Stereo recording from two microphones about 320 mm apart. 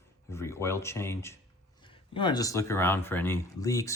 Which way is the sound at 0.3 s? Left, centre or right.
Centre.